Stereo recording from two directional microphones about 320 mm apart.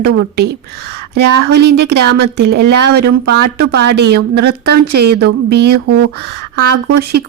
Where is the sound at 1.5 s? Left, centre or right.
Right.